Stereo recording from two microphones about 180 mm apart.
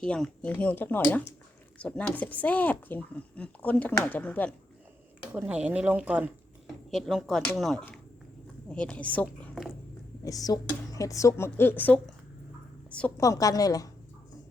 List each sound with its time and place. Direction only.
0.0 s speech: 5° left (ahead or behind)
5.2 s speech: 10° right (ahead or behind)
10.2 s a woman's voice: 20° left (ahead or behind)
13.1 s a woman's voice: 20° left (ahead or behind)